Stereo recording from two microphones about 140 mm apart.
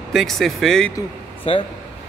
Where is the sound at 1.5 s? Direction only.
40° left (ahead or behind).